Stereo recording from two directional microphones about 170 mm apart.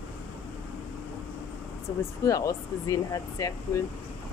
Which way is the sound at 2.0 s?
20° left (ahead or behind).